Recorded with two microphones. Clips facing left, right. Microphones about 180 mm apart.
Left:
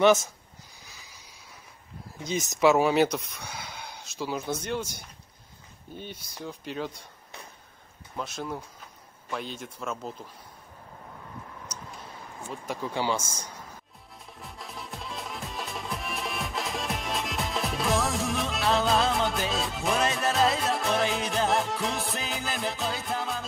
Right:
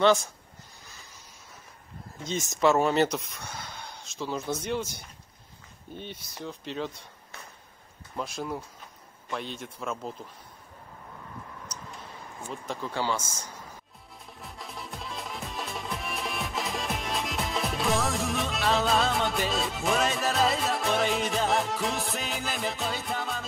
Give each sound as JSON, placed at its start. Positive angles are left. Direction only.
{"t": 2.1, "sound": "speech", "side_deg": 15}
{"t": 2.6, "sound": "speech", "side_deg": 5}
{"t": 5.9, "sound": "speech", "side_deg": 5}
{"t": 8.2, "sound": "speech", "side_deg": 0}
{"t": 12.6, "sound": "speech", "side_deg": 15}
{"t": 14.4, "sound": "music", "side_deg": 0}